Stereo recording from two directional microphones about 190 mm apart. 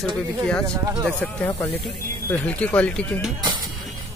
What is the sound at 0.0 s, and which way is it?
Speech, 5° left (ahead or behind).